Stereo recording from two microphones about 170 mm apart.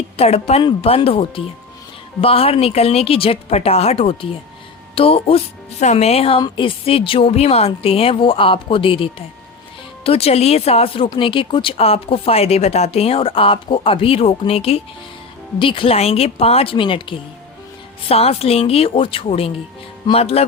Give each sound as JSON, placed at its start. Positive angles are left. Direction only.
{"t": 0.2, "sound": "speech", "side_deg": 35}